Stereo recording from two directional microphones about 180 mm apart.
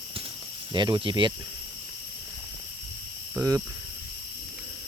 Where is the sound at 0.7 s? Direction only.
25° right (ahead or behind).